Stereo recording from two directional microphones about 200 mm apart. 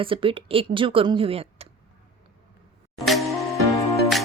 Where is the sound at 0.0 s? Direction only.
25° right (ahead or behind).